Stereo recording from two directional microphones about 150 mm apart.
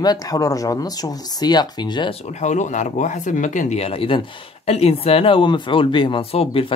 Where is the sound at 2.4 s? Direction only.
50° left (ahead or behind).